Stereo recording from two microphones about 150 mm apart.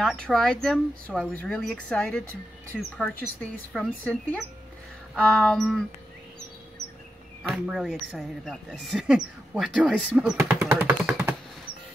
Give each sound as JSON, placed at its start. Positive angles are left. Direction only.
{"t": 0.0, "sound": "speech", "side_deg": 5}
{"t": 7.5, "sound": "speech", "side_deg": -5}
{"t": 10.8, "sound": "computer keyboard", "side_deg": -15}